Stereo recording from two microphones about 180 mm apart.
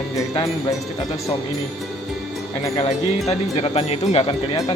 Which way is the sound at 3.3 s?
35° left (ahead or behind).